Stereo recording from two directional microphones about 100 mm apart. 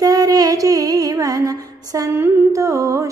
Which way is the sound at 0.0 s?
40° right (ahead or behind).